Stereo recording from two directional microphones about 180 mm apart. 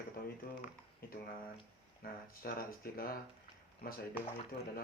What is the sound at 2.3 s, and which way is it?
Speech, 55° left (ahead or behind).